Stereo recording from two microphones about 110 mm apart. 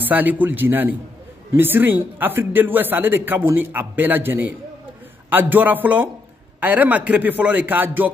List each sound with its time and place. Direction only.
0.0 s speech: 15° right (ahead or behind)